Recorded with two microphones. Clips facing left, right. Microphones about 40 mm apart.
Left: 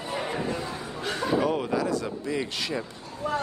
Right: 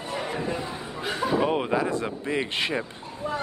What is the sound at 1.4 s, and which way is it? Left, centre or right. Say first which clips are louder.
Speech: right 2 dB; right.